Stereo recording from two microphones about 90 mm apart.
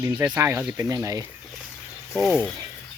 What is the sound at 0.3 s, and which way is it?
Speech, 30° right (ahead or behind).